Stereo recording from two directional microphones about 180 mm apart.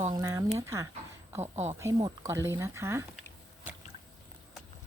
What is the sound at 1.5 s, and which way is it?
Speech, 40° right (ahead or behind).